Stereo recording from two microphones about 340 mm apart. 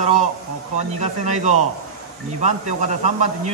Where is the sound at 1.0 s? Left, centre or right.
Centre.